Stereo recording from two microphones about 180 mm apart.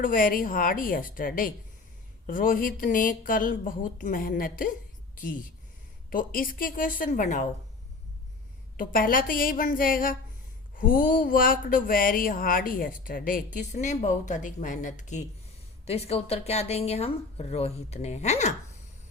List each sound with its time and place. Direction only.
0.0 s speech: 50° left (ahead or behind)
6.1 s speech: 50° left (ahead or behind)
8.8 s speech: 50° left (ahead or behind)